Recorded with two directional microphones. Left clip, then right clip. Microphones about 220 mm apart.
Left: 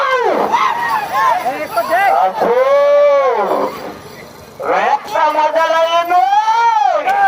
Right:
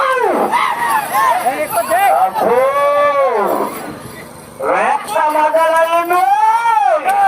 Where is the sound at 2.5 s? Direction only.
45° left (ahead or behind).